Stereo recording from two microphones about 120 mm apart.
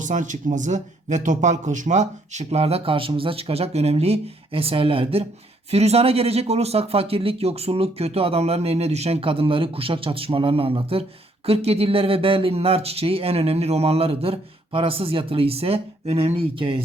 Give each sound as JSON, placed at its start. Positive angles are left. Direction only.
{"t": 0.0, "sound": "speech", "side_deg": -90}
{"t": 5.7, "sound": "speech", "side_deg": -60}